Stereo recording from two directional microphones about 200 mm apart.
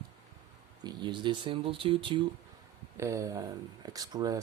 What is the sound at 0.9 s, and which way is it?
Speech, 20° right (ahead or behind).